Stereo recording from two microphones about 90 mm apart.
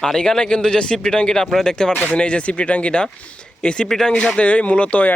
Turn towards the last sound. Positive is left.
turn(degrees=15)  # may be behind; listen again after turning